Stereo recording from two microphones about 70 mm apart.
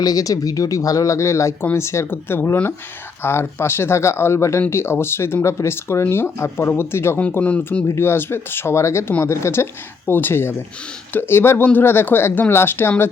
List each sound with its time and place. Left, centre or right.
0.0 s speech: left
7.3 s speech: left
7.9 s speech: left